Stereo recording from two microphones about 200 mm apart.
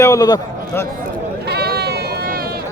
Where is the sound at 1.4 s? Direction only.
55° right (ahead or behind).